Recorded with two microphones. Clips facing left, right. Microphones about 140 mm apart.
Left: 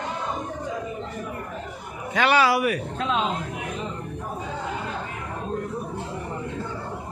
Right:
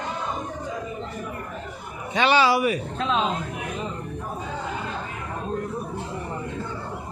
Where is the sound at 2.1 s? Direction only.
25° right (ahead or behind).